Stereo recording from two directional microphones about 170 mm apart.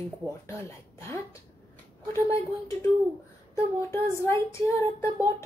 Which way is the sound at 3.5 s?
15° left (ahead or behind).